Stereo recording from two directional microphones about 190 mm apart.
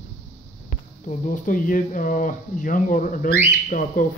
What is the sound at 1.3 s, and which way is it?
Speech, 45° left (ahead or behind).